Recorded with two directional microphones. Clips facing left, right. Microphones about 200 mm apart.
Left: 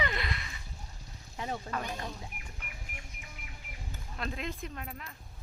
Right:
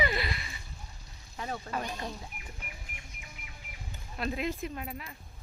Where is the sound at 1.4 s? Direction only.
20° left (ahead or behind).